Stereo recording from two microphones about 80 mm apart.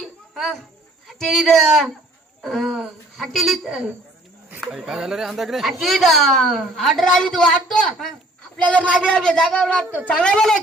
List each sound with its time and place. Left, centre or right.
0.0 s cricket: centre
1.0 s speech: centre
8.6 s speech: centre